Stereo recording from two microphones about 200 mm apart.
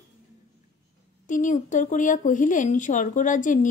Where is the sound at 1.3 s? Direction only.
40° left (ahead or behind).